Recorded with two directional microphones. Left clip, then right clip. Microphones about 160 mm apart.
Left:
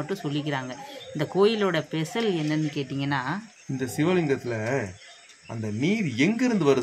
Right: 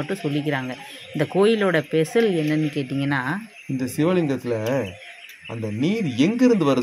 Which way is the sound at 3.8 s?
15° right (ahead or behind).